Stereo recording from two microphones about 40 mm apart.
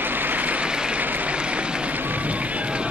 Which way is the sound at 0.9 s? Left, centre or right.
Right.